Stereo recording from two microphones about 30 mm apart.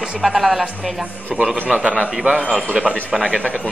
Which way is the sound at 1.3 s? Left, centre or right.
Right.